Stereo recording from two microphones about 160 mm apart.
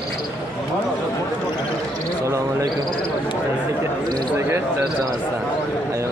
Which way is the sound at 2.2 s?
20° right (ahead or behind).